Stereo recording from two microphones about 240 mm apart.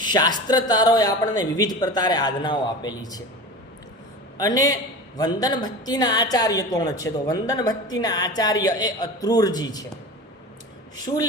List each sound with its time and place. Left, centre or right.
0.0 s a woman's voice: centre
4.4 s a woman's voice: centre
11.0 s a woman's voice: centre